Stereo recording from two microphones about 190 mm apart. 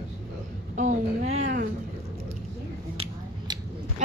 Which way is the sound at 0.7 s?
35° right (ahead or behind).